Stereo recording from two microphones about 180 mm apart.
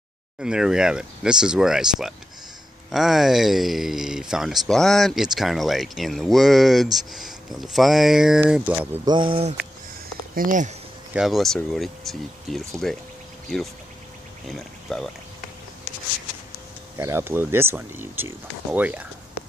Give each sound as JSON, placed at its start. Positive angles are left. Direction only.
{"t": 0.4, "sound": "speech", "side_deg": -5}
{"t": 9.0, "sound": "speech", "side_deg": -25}
{"t": 10.3, "sound": "speech", "side_deg": -50}
{"t": 11.1, "sound": "speech", "side_deg": 0}
{"t": 14.9, "sound": "speech", "side_deg": 0}
{"t": 16.9, "sound": "speech", "side_deg": -15}